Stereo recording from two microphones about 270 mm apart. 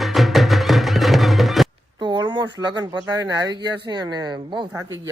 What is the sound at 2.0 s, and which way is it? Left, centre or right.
Speech, centre.